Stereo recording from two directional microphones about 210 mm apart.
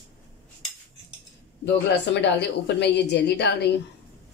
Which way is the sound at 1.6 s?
55° left (ahead or behind).